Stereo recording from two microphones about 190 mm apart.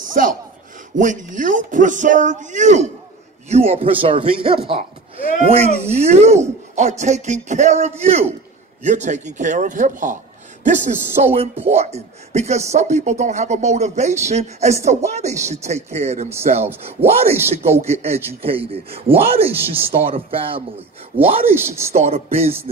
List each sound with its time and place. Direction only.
0.2 s a sound: 45° right (ahead or behind)
0.9 s speech: 40° right (ahead or behind)
21.5 s speech: 15° right (ahead or behind)
21.9 s speech: 35° right (ahead or behind)